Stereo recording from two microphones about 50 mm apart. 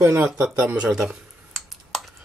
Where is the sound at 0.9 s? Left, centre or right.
Centre.